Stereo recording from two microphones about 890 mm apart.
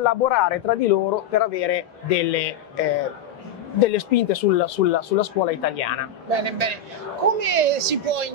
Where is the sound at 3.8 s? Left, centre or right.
Left.